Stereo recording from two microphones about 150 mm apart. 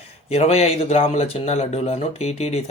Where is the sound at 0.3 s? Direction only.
45° left (ahead or behind).